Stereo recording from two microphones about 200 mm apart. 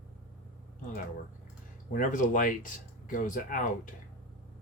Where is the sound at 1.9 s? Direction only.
40° left (ahead or behind).